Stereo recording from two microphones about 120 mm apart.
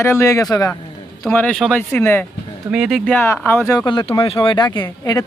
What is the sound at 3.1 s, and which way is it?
Speech, 20° left (ahead or behind).